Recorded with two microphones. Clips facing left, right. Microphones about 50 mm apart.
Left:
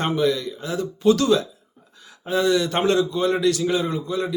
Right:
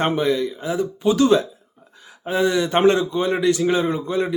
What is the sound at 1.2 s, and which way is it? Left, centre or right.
Speech, right.